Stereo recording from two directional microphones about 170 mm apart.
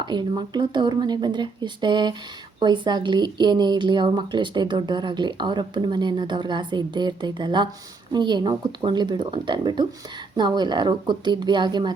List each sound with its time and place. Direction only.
0.0 s speech: 25° right (ahead or behind)